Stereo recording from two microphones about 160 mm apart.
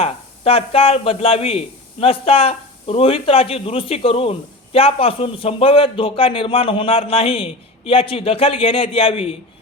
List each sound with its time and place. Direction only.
0.0 s a man's voice: 40° left (ahead or behind)